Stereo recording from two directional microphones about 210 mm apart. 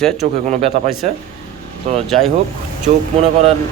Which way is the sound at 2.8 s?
30° right (ahead or behind).